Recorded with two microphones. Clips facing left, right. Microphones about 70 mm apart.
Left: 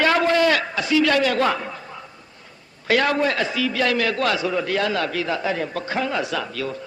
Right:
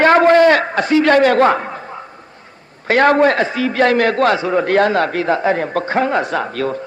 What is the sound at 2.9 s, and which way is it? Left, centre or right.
A man's voice, right.